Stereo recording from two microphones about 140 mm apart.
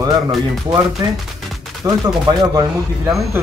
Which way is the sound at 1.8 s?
25° right (ahead or behind).